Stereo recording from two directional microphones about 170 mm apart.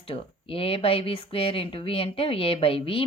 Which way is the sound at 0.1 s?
35° left (ahead or behind).